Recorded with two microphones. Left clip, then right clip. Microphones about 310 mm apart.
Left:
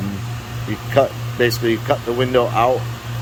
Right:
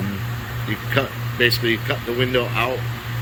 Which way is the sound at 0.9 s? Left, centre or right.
Centre.